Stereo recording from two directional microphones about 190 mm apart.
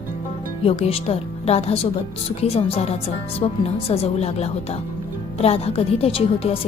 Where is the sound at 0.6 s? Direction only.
30° left (ahead or behind).